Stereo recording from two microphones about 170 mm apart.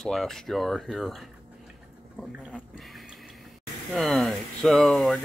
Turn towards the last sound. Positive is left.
turn(degrees=0)  # may be behind; listen again after turning